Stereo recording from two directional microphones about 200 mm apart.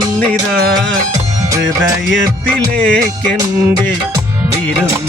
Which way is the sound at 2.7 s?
5° left (ahead or behind).